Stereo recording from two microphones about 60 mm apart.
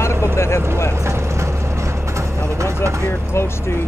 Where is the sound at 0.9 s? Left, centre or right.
Right.